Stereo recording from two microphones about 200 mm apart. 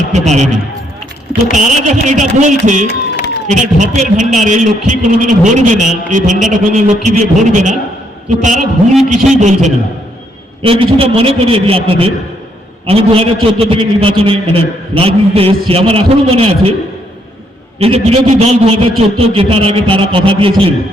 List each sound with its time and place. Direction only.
0.1 s a man's voice: 35° right (ahead or behind)
1.5 s a man's voice: 35° right (ahead or behind)
17.7 s a man's voice: 30° right (ahead or behind)